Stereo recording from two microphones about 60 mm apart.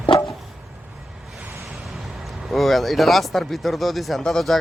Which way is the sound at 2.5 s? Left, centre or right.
Centre.